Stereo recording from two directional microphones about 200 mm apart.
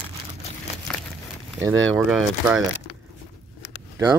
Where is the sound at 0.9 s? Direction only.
5° left (ahead or behind).